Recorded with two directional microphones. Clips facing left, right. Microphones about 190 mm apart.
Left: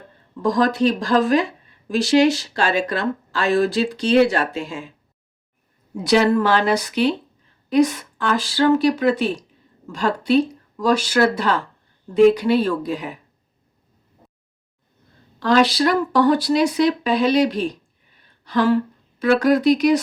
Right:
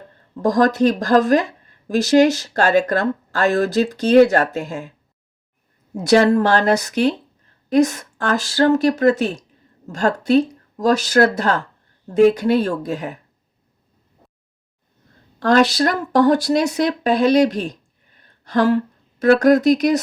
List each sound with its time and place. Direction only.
0.4 s speech: 45° right (ahead or behind)
5.9 s speech: 45° right (ahead or behind)
15.4 s speech: 45° right (ahead or behind)